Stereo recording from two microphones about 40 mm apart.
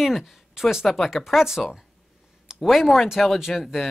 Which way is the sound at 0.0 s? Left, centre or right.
Centre.